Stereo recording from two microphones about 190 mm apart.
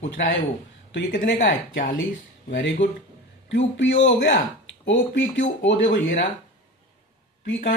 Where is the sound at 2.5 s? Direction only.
70° left (ahead or behind).